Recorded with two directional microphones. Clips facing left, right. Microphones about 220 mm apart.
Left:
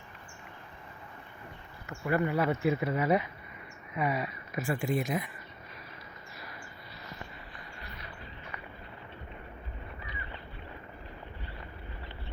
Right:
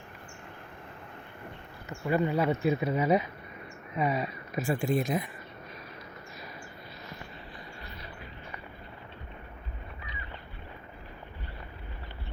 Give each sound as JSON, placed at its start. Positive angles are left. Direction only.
{"t": 1.9, "sound": "speech", "side_deg": -20}